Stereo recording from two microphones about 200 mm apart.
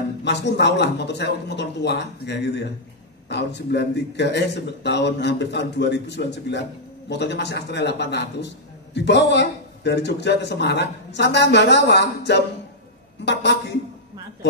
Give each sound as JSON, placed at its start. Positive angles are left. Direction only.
{"t": 0.2, "sound": "a man's voice", "side_deg": 60}